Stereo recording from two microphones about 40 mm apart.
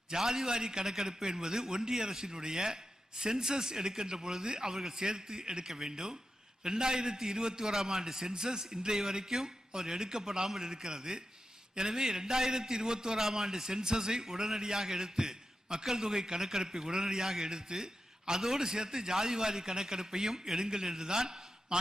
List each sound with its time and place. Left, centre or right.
0.1 s a man's voice: centre